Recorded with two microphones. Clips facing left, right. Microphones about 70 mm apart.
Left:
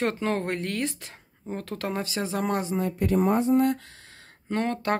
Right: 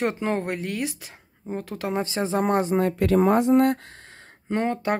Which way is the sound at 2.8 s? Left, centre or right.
Right.